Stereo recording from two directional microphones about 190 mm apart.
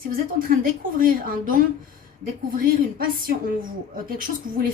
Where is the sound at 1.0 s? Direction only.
50° right (ahead or behind).